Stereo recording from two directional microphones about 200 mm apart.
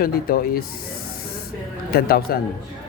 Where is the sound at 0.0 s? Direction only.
50° left (ahead or behind).